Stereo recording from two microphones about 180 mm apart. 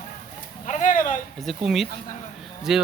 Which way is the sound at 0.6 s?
40° left (ahead or behind).